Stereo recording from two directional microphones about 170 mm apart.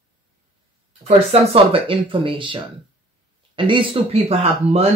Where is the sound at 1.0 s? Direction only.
35° right (ahead or behind).